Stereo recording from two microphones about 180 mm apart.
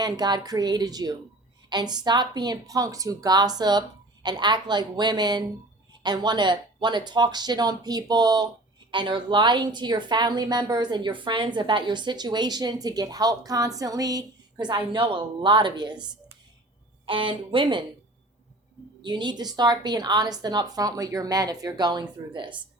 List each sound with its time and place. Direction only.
0.0 s a woman's voice: 20° right (ahead or behind)
17.1 s a woman's voice: 30° right (ahead or behind)
19.0 s a woman's voice: 25° right (ahead or behind)